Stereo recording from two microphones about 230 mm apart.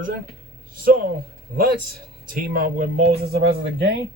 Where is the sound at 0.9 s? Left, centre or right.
Right.